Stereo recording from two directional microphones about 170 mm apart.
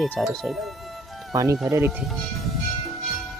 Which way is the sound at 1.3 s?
15° right (ahead or behind).